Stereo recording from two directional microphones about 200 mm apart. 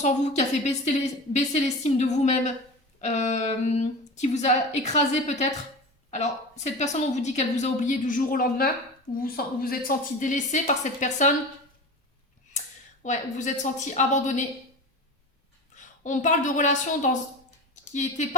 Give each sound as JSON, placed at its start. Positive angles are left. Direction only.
{"t": 0.0, "sound": "a woman's voice", "side_deg": 35}
{"t": 12.5, "sound": "a woman's voice", "side_deg": 35}
{"t": 15.7, "sound": "a woman's voice", "side_deg": 35}